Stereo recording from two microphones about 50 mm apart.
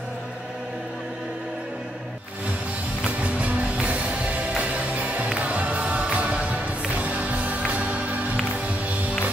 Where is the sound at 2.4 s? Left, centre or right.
Right.